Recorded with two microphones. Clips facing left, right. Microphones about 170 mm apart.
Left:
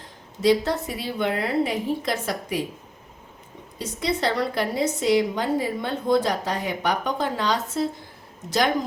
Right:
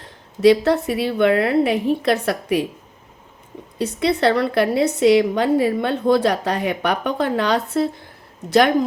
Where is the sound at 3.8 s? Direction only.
65° right (ahead or behind).